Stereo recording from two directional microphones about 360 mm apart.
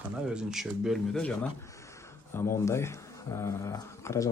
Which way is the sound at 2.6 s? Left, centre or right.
Centre.